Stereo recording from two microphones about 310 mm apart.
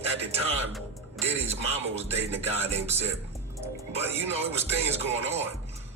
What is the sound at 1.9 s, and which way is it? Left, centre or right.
Speech, centre.